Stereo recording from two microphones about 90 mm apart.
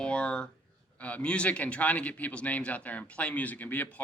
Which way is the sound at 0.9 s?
15° left (ahead or behind).